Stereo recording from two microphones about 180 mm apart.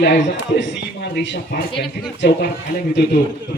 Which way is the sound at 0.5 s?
75° left (ahead or behind).